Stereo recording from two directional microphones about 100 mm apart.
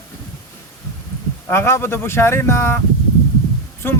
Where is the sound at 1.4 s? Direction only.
25° left (ahead or behind).